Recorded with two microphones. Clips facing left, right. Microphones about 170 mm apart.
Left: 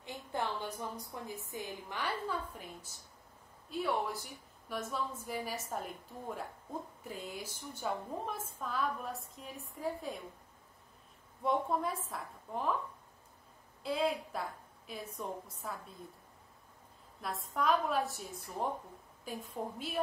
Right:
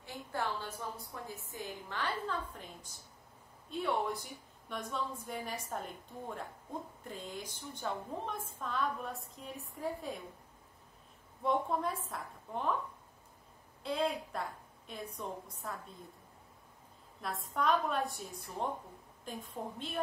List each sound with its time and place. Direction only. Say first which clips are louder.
0.0 s a woman's voice: even; 20° left (ahead or behind); by 10.2 s centre (ahead or behind)
11.4 s a woman's voice: even; centre (ahead or behind)
13.8 s a woman's voice: left 1 dB; centre (ahead or behind)
17.2 s a woman's voice: even; centre (ahead or behind)